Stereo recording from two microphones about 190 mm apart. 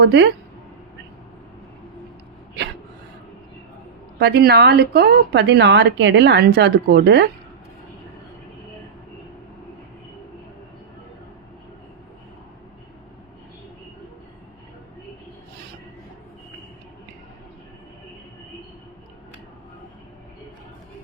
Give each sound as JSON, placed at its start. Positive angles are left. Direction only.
{"t": 0.0, "sound": "a woman's voice", "side_deg": -65}
{"t": 4.2, "sound": "a woman's voice", "side_deg": -60}